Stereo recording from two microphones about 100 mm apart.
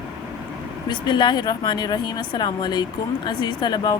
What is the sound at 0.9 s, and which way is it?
A woman's voice, 45° left (ahead or behind).